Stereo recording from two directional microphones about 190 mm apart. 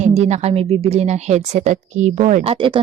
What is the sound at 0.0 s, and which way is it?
A woman's voice, 35° right (ahead or behind).